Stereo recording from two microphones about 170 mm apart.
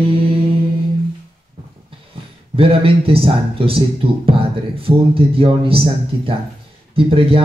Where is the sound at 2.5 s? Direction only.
35° right (ahead or behind).